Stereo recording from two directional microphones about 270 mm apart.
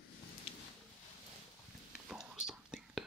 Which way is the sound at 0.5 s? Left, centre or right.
Left.